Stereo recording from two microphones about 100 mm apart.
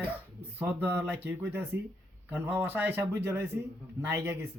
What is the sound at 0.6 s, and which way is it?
Speech, 20° right (ahead or behind).